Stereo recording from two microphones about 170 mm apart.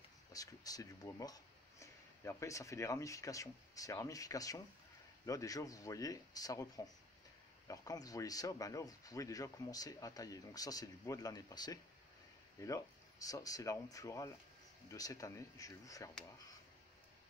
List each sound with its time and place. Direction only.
0.3 s speech: 20° left (ahead or behind)